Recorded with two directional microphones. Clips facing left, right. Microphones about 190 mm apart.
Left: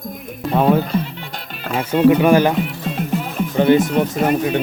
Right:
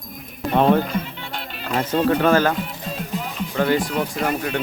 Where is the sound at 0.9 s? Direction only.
40° left (ahead or behind).